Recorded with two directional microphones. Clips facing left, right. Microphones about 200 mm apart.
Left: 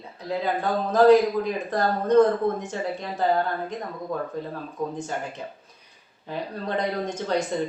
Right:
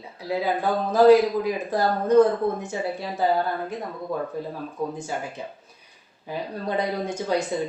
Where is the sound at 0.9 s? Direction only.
10° right (ahead or behind).